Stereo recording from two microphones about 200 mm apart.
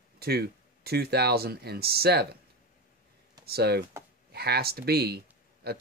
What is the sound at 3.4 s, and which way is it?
Speech, 50° right (ahead or behind).